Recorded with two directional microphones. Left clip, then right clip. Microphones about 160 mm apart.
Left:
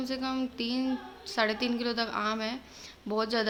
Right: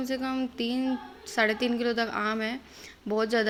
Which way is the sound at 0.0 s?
15° right (ahead or behind).